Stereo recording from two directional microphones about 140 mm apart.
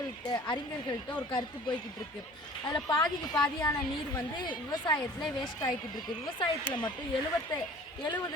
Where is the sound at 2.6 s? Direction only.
30° left (ahead or behind).